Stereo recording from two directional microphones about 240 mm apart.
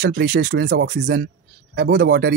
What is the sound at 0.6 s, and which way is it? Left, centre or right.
Speech, right.